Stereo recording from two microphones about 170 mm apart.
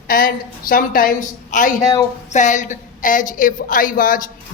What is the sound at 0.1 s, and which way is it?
Speech, 60° left (ahead or behind).